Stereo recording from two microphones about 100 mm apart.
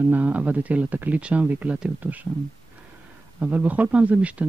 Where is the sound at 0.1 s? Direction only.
15° right (ahead or behind).